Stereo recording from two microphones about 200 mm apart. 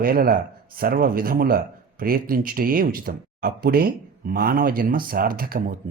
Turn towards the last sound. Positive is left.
turn(degrees=-45)  # may be behind; listen again after turning